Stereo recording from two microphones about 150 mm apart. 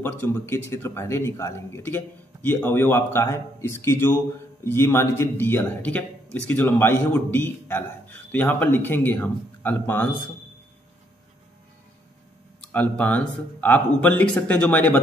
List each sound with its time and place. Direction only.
0.0 s speech: 15° left (ahead or behind)
12.7 s speech: 10° left (ahead or behind)